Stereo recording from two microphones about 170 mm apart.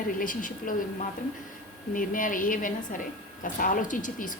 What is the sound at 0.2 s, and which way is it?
Speech, 55° left (ahead or behind).